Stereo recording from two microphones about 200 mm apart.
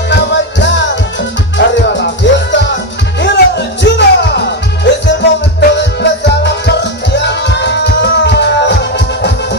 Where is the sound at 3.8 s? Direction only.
60° left (ahead or behind).